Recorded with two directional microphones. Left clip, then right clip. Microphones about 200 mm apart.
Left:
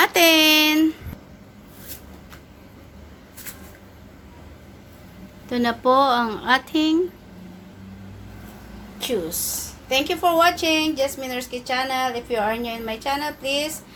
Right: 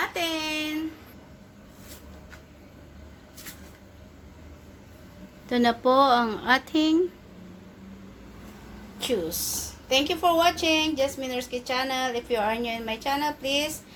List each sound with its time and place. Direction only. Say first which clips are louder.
0.0 s a sound: left 13 dB; 50° left (ahead or behind)
5.5 s a woman's voice: left 2 dB; 5° right (ahead or behind)
9.0 s a woman's voice: left 2 dB; centre (ahead or behind)